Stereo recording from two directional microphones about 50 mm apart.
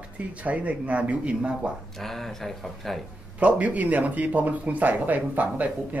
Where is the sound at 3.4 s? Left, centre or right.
Right.